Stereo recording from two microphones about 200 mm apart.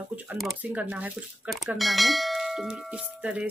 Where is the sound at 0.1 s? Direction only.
5° right (ahead or behind).